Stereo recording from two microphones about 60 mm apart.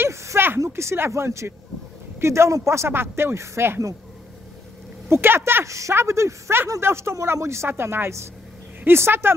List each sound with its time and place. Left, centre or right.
0.0 s a sound: right
0.7 s a woman's voice: right
5.1 s speech: right
5.7 s a woman's voice: right